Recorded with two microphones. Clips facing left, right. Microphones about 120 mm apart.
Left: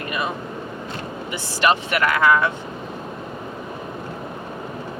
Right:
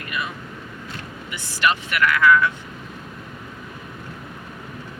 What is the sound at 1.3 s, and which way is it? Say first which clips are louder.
Speech: left 3 dB; 30° left (ahead or behind).